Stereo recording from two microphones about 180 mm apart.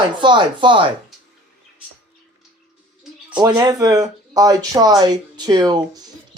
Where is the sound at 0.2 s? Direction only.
25° right (ahead or behind).